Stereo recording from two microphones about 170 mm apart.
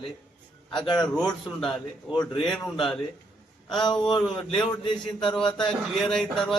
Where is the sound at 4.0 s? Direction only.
25° left (ahead or behind).